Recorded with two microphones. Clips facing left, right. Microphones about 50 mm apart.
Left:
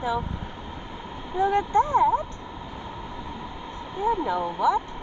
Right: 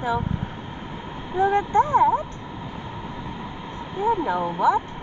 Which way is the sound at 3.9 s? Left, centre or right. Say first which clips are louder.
Right 2 dB; right.